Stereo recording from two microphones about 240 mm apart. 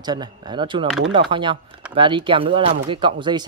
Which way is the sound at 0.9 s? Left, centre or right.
Centre.